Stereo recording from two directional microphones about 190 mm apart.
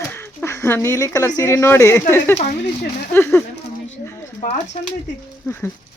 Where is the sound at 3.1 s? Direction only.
10° left (ahead or behind).